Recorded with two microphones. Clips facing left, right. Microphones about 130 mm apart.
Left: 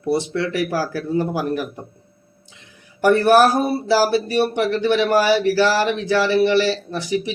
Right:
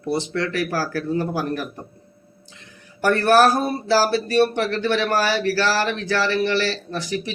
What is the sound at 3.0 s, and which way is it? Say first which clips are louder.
Speech: left 2 dB; 20° left (ahead or behind).